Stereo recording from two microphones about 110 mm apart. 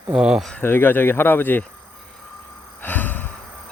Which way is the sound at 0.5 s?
20° left (ahead or behind).